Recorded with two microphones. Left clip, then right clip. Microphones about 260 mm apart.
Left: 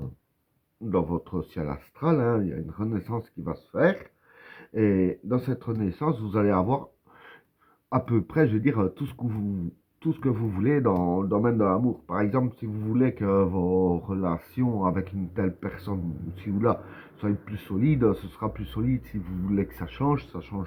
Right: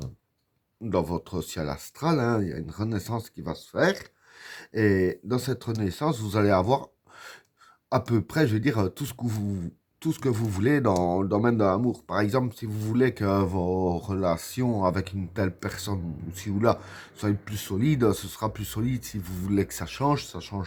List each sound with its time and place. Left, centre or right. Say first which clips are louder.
0.9 s speech: even; right